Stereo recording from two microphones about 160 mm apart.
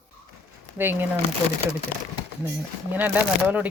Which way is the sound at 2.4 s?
10° right (ahead or behind).